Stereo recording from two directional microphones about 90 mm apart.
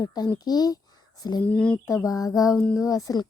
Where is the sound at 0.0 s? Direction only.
45° left (ahead or behind).